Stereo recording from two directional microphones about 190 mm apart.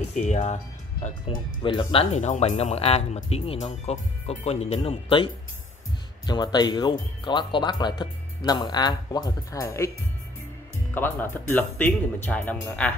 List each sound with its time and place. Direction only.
0.2 s speech: 35° left (ahead or behind); by 9.8 s 15° left (ahead or behind)
11.0 s speech: 10° left (ahead or behind)